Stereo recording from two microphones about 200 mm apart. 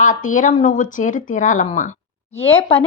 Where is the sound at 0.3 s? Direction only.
40° left (ahead or behind).